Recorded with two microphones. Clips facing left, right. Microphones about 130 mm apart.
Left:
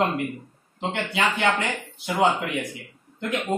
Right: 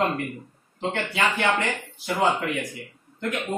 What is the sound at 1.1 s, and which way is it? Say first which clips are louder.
A man's voice: left 1 dB; 20° left (ahead or behind).